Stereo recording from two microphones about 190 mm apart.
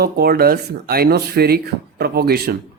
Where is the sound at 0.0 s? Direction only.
55° right (ahead or behind).